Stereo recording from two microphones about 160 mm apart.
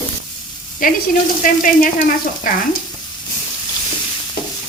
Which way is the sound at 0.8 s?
60° left (ahead or behind).